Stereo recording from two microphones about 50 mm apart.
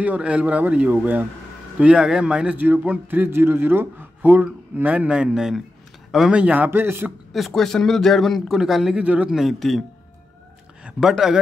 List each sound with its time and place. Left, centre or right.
0.0 s speech: right
2.0 s speech: centre
2.5 s speech: right
3.3 s speech: right; by 5.6 s centre
6.3 s speech: right
6.7 s speech: right
7.3 s a man's voice: centre
8.5 s speech: centre
8.9 s speech: right
9.3 s a man's voice: centre
11.0 s speech: centre